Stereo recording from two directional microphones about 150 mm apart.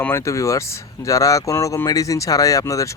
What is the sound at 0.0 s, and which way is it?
Speech, 15° left (ahead or behind).